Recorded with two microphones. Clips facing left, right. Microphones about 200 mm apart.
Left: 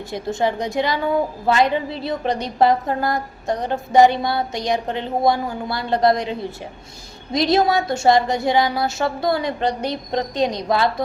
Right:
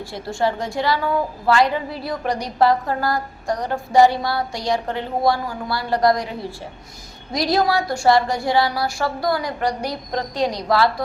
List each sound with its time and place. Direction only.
0.1 s a woman's voice: 20° left (ahead or behind)